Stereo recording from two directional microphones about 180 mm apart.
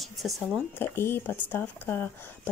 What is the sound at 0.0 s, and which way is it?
Speech, centre (ahead or behind).